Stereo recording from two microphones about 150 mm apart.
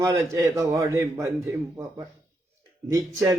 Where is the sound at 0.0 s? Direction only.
20° right (ahead or behind).